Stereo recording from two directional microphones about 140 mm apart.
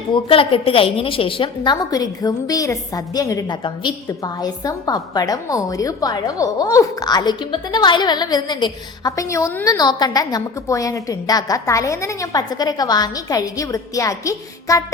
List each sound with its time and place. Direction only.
0.1 s a woman's voice: 40° left (ahead or behind); by 9.6 s 15° left (ahead or behind)
9.6 s a woman's voice: 30° left (ahead or behind)